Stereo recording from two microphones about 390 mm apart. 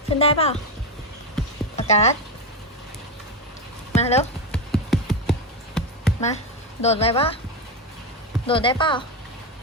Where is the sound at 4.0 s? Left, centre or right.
Centre.